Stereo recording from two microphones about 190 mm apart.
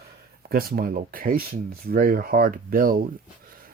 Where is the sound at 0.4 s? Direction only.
50° right (ahead or behind).